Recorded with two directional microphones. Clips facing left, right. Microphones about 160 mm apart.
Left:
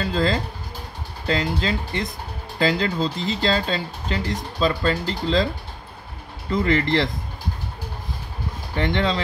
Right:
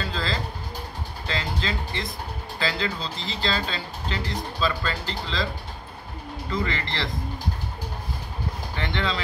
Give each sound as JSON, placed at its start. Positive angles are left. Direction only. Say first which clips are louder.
{"t": 0.0, "sound": "speech", "louder": "left 7 dB", "side_deg": 45}
{"t": 6.5, "sound": "speech", "louder": "left 9 dB", "side_deg": 45}
{"t": 8.7, "sound": "speech", "louder": "left 7 dB", "side_deg": 40}